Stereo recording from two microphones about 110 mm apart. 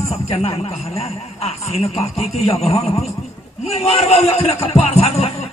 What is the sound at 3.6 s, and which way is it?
Speech, 65° left (ahead or behind).